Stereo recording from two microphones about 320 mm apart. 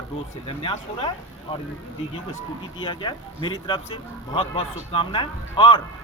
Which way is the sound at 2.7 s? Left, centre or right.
Centre.